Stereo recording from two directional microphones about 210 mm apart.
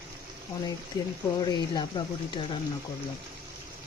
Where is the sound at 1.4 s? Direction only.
20° left (ahead or behind).